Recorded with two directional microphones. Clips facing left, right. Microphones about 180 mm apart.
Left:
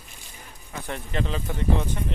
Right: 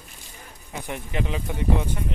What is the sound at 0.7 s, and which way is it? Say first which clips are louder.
Speech: even; 15° right (ahead or behind).